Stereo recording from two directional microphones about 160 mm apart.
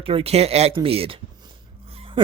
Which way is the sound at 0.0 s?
35° right (ahead or behind).